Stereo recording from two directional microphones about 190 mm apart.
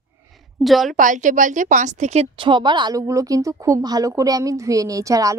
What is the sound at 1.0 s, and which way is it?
A woman's voice, 45° right (ahead or behind).